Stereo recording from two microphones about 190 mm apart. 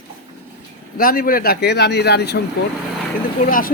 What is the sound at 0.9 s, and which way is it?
Speech, 50° left (ahead or behind).